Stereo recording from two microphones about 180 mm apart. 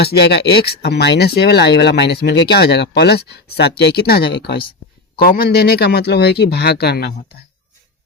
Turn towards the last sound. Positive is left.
turn(degrees=65)  # may be behind; listen again after turning